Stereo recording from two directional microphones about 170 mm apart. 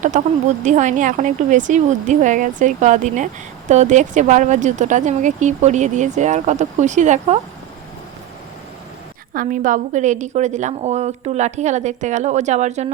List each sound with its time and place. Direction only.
0.0 s speech: 45° right (ahead or behind)
9.3 s speech: 50° right (ahead or behind)